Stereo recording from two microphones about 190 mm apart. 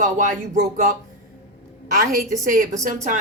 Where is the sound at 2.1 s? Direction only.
45° right (ahead or behind).